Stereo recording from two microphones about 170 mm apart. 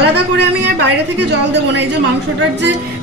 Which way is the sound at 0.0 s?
85° right.